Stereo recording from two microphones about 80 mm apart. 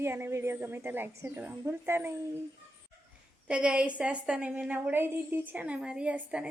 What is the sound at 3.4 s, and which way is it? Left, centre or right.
A woman's voice, centre.